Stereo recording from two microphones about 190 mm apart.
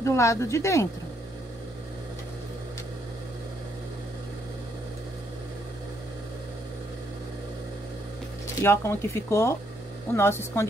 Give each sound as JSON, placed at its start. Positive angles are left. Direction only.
{"t": 0.0, "sound": "speech", "side_deg": 15}
{"t": 8.5, "sound": "speech", "side_deg": 15}